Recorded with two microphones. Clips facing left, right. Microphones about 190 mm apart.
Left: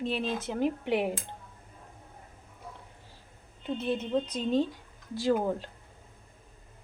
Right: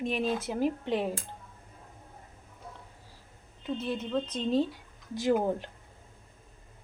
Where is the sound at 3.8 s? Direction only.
20° left (ahead or behind).